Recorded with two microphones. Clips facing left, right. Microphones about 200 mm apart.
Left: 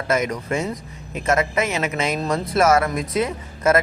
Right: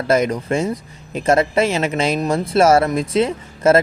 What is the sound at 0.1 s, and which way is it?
A man's voice, 30° right (ahead or behind).